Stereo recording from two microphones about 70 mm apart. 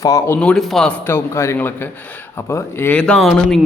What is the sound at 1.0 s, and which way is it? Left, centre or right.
Speech, left.